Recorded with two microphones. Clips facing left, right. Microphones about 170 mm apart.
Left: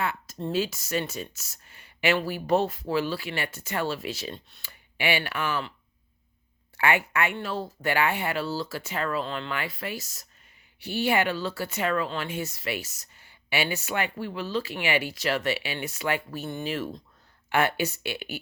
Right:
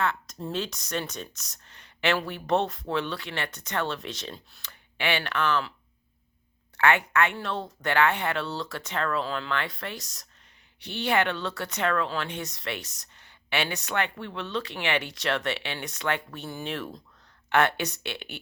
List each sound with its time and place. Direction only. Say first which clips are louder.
0.0 s speech: right 1 dB; 5° left (ahead or behind)
6.7 s speech: right 2 dB; 10° left (ahead or behind)